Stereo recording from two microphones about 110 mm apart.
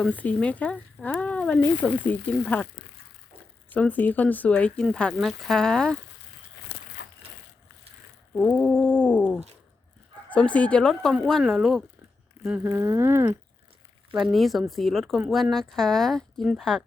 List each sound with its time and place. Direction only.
0.0 s speech: 15° left (ahead or behind)
3.8 s speech: 15° left (ahead or behind)
8.4 s a sound: 10° left (ahead or behind)
10.2 s speech: 10° left (ahead or behind)
12.5 s speech: 20° right (ahead or behind)
14.1 s speech: 5° right (ahead or behind)